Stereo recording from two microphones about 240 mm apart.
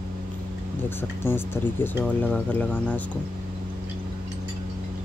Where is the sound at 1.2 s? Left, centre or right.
Centre.